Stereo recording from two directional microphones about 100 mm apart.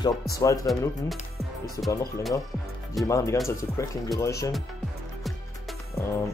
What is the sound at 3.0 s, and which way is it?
Speech, 35° left (ahead or behind).